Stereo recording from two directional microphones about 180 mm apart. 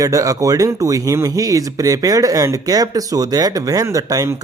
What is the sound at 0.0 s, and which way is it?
Speech, 20° right (ahead or behind).